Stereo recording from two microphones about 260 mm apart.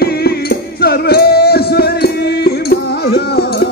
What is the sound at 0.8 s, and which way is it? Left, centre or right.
Music, left.